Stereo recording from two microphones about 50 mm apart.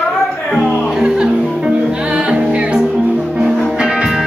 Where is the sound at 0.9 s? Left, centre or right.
Centre.